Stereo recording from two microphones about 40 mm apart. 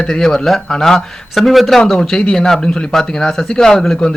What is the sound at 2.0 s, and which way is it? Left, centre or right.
Speech, centre.